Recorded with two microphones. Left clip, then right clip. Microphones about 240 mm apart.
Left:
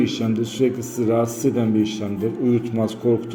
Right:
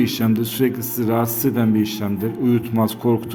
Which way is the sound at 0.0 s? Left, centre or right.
Right.